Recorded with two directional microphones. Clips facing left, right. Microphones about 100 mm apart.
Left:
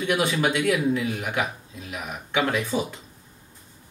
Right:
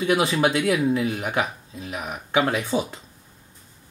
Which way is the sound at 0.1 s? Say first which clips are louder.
Right 2 dB; 30° right (ahead or behind).